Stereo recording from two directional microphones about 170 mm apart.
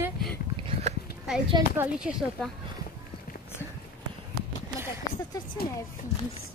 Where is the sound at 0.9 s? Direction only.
40° right (ahead or behind).